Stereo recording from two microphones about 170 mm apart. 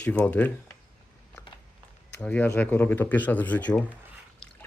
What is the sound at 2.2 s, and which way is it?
Speech, 10° left (ahead or behind).